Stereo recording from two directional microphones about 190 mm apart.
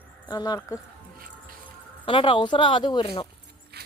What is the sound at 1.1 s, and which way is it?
Music, 50° right (ahead or behind).